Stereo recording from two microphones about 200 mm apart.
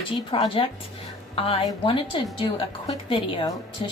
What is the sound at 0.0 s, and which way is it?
A woman's voice, 25° left (ahead or behind).